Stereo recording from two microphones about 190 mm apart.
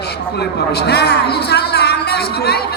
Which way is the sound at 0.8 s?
60° left (ahead or behind).